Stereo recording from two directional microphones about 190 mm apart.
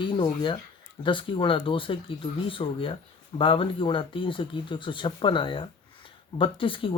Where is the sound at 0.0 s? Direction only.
25° left (ahead or behind).